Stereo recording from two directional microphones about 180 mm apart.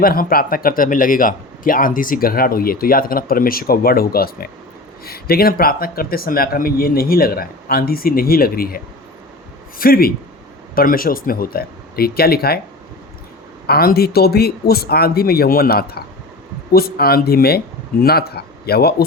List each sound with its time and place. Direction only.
0.0 s a man's voice: 55° left (ahead or behind)
13.7 s speech: 60° left (ahead or behind)